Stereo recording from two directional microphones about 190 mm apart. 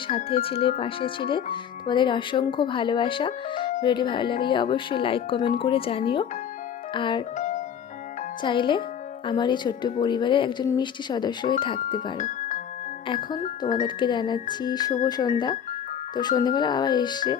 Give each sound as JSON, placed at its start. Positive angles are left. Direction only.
{"t": 0.1, "sound": "speech", "side_deg": 35}
{"t": 7.3, "sound": "music", "side_deg": 40}
{"t": 8.4, "sound": "speech", "side_deg": 25}
{"t": 12.1, "sound": "speech", "side_deg": 40}
{"t": 13.1, "sound": "speech", "side_deg": 20}